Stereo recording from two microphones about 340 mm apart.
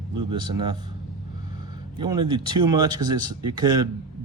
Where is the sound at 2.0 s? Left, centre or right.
Centre.